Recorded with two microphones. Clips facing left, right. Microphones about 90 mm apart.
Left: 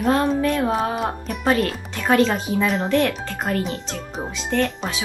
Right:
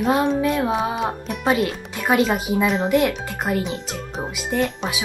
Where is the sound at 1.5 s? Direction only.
15° right (ahead or behind).